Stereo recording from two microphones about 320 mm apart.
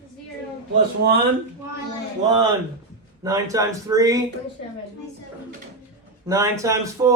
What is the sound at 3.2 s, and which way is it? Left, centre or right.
Speech, centre.